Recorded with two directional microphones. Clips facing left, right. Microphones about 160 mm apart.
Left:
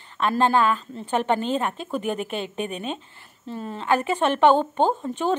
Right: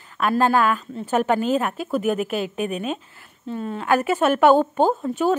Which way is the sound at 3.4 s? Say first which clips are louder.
Right 4 dB; centre (ahead or behind).